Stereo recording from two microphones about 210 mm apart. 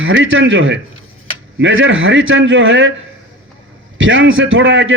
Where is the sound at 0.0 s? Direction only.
65° right (ahead or behind).